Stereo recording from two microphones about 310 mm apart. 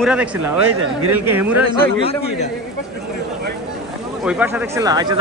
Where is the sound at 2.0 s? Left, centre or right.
Centre.